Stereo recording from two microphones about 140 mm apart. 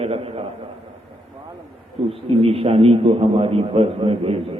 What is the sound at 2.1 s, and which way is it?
A man's voice, 45° right (ahead or behind).